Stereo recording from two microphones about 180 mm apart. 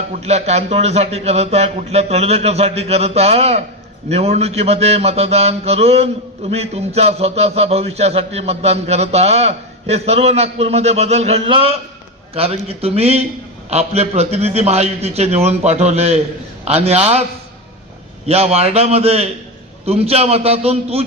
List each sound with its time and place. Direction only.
0.1 s mantra: 35° right (ahead or behind)
18.3 s mantra: 35° right (ahead or behind)